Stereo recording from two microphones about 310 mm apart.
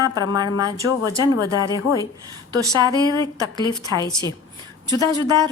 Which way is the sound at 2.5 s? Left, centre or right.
Centre.